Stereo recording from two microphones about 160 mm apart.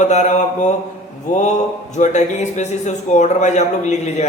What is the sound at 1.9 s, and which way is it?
A man's voice, 45° left (ahead or behind).